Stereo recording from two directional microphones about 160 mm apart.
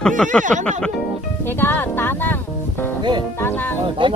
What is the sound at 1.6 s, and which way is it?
Speech, 15° left (ahead or behind).